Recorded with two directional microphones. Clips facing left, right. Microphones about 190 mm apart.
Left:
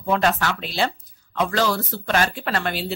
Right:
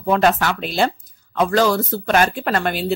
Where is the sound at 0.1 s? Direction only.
50° right (ahead or behind).